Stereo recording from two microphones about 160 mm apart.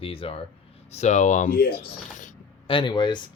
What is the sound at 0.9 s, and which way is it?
Speech, 45° left (ahead or behind).